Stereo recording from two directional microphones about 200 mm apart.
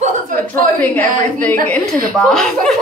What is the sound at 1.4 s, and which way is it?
A woman's voice, 5° left (ahead or behind).